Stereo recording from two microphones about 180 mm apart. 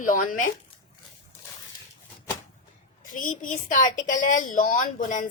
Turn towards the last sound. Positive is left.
turn(degrees=45)  # may be behind; listen again after turning